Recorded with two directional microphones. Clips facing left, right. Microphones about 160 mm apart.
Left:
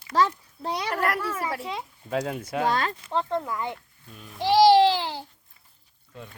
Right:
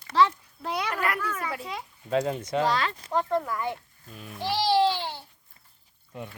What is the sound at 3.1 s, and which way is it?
Speech, 20° left (ahead or behind).